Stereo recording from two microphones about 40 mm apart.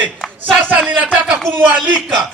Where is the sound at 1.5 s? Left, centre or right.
Right.